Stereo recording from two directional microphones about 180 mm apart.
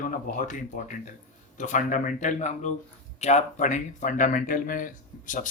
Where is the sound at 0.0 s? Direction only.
50° left (ahead or behind).